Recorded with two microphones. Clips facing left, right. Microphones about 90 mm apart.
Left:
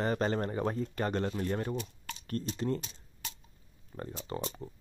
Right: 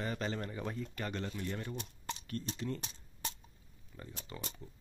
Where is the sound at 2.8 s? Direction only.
35° right (ahead or behind).